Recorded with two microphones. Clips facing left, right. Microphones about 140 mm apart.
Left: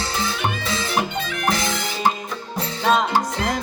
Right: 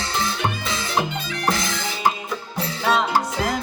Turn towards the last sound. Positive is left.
turn(degrees=-5)  # may be behind; listen again after turning